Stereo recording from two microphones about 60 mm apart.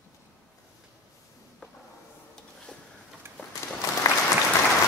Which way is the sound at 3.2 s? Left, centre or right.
Right.